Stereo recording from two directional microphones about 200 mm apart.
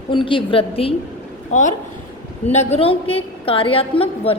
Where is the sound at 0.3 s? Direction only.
25° left (ahead or behind).